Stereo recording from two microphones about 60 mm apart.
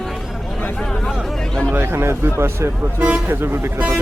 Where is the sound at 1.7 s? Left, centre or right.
Right.